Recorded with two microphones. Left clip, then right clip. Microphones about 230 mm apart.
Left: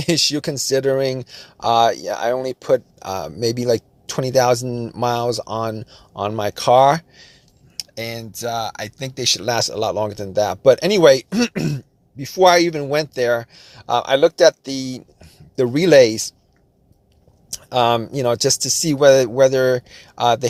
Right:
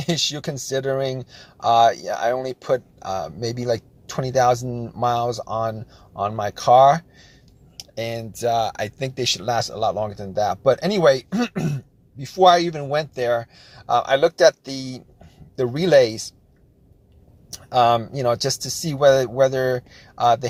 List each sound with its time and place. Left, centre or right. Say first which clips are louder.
0.0 s speech: left 5 dB; left
7.8 s speech: even; centre
9.2 s speech: left 4 dB; left
17.5 s speech: even; left